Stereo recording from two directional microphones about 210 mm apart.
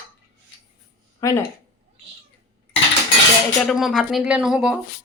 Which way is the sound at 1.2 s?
15° left (ahead or behind).